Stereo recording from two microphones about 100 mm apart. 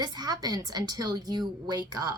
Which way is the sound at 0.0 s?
45° right (ahead or behind).